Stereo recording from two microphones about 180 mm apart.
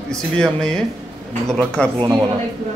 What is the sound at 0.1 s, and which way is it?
Speech, 5° left (ahead or behind).